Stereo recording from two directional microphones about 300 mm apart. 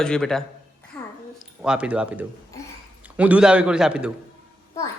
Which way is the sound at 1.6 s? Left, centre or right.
Centre.